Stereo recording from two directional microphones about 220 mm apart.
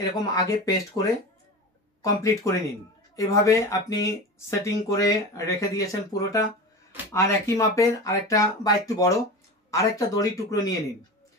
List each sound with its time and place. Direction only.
0.0 s speech: 15° left (ahead or behind)
7.1 s speech: 15° left (ahead or behind)